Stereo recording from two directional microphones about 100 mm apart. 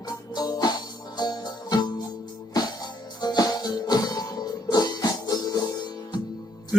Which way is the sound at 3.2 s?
40° left (ahead or behind).